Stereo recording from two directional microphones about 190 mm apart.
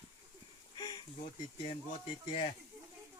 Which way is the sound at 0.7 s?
20° left (ahead or behind).